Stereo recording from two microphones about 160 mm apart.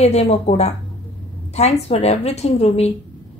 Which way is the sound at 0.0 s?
45° left (ahead or behind).